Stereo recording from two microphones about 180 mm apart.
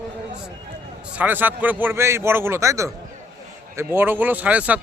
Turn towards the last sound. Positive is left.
turn(degrees=-10)  # may be behind; listen again after turning